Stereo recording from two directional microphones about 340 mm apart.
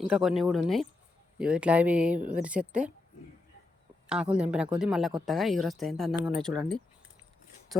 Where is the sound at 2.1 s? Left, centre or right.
Right.